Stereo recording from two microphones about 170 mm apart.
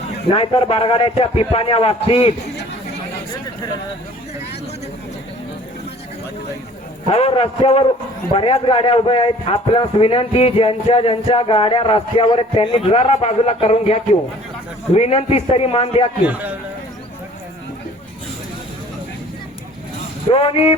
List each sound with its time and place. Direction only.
0.3 s a man's voice: 35° left (ahead or behind)
7.1 s a man's voice: 35° left (ahead or behind)
16.2 s a man's voice: 10° right (ahead or behind)
20.3 s a man's voice: 35° left (ahead or behind)